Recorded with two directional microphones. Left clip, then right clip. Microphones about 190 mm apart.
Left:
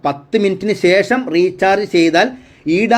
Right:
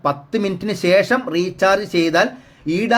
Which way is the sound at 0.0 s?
15° left (ahead or behind).